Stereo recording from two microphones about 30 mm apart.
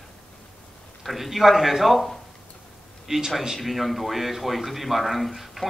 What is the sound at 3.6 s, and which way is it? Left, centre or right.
A man's voice, centre.